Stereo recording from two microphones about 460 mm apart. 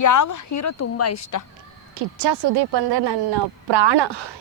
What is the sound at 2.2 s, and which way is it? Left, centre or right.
Speech, right.